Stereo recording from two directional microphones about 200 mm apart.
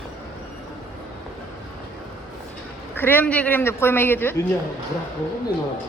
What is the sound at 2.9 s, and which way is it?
Speech, 10° left (ahead or behind).